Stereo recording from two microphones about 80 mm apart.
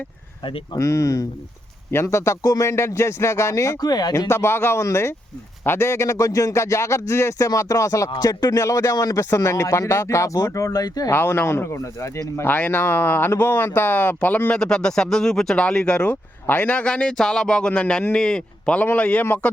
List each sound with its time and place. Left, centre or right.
0.8 s speech: left
4.3 s speech: left
11.1 s speech: left
12.4 s speech: left
14.5 s a man's voice: centre